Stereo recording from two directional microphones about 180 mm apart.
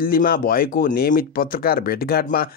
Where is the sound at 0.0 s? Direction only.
55° left (ahead or behind).